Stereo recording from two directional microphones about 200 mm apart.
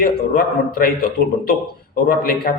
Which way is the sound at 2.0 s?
50° left (ahead or behind).